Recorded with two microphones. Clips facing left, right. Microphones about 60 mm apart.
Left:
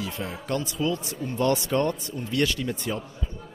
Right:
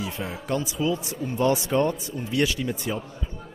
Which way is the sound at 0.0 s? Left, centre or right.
Centre.